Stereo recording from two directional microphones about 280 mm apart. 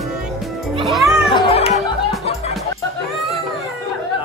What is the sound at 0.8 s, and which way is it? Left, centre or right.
Music, centre.